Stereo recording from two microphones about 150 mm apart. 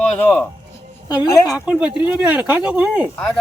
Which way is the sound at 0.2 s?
15° left (ahead or behind).